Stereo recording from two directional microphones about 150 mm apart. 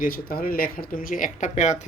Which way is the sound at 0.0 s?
75° left (ahead or behind).